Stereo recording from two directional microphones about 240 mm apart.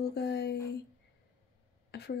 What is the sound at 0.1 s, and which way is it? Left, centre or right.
Speech, left.